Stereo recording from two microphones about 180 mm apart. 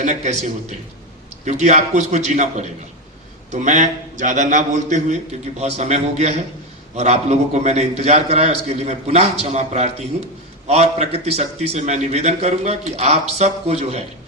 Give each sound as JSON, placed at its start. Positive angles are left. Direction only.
{"t": 0.0, "sound": "a man's voice", "side_deg": -40}